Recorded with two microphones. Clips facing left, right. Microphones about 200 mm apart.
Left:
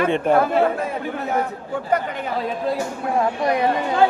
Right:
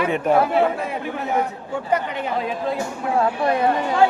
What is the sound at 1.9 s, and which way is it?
Speech, 45° left (ahead or behind).